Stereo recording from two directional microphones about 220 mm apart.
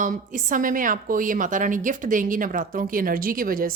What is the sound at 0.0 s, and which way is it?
A woman's voice, 35° right (ahead or behind).